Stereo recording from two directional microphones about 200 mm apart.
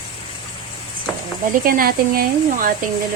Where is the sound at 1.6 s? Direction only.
45° right (ahead or behind).